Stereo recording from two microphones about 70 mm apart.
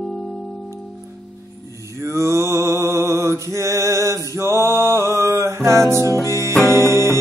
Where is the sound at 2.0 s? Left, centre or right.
Right.